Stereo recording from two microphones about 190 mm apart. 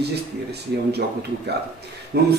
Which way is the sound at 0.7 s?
60° right (ahead or behind).